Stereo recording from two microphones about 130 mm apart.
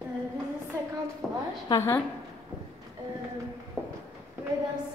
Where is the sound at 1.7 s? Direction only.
25° left (ahead or behind).